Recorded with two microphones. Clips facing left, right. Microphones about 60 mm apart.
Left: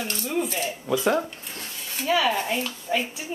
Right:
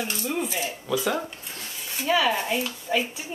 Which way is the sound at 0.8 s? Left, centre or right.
Left.